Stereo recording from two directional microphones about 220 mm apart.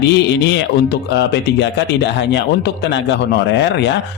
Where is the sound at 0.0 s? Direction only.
50° left (ahead or behind).